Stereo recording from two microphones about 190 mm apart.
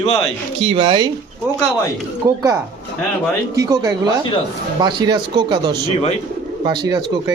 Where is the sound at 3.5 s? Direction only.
20° right (ahead or behind).